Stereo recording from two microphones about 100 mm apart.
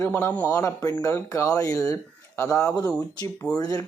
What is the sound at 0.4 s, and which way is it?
Speech, 30° left (ahead or behind).